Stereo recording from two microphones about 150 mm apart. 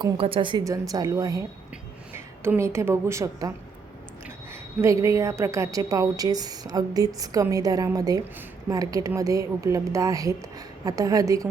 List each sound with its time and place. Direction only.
0.0 s speech: 35° right (ahead or behind)
0.6 s a woman's voice: 25° right (ahead or behind)
4.8 s a woman's voice: 20° right (ahead or behind)